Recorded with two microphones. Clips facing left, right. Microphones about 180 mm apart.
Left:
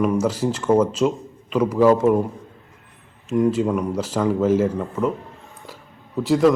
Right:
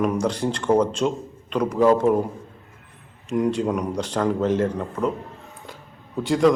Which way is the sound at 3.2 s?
Centre (ahead or behind).